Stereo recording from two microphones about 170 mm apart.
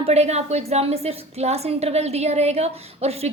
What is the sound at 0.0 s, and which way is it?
A woman's voice, 40° right (ahead or behind).